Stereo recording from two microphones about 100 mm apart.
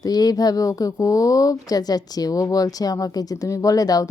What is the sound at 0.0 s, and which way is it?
Speech, 40° left (ahead or behind).